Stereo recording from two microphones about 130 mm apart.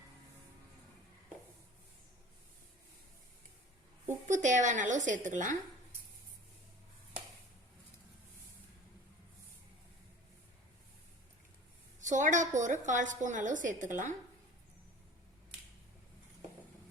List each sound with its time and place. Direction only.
4.3 s a woman's voice: 70° right (ahead or behind)
11.9 s a woman's voice: 75° right (ahead or behind)